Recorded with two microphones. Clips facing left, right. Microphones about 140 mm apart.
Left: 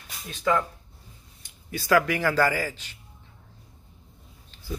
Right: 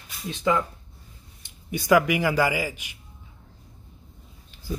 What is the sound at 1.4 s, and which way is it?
Speech, 20° right (ahead or behind).